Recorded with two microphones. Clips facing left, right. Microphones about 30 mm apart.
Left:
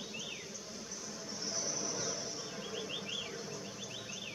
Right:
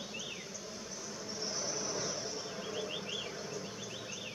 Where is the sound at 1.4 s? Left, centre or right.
Centre.